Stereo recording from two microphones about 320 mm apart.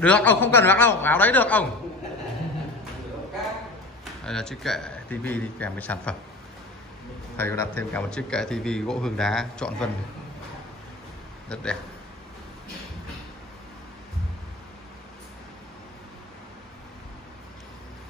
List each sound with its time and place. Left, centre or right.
0.0 s a man's voice: centre
4.2 s a man's voice: centre
7.3 s a man's voice: centre
11.4 s a man's voice: centre